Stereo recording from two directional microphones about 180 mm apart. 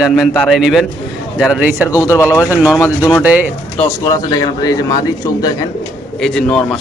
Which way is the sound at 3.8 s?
20° left (ahead or behind).